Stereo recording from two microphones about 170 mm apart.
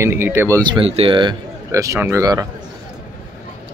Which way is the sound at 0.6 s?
30° right (ahead or behind).